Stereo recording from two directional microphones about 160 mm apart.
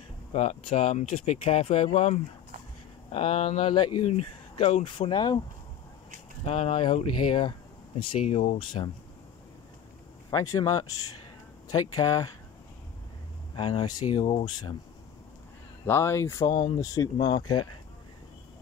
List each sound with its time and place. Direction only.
0.3 s speech: 40° left (ahead or behind)
6.4 s speech: 35° left (ahead or behind)
10.3 s speech: 20° left (ahead or behind)
13.6 s speech: 30° left (ahead or behind)
15.8 s speech: 15° left (ahead or behind)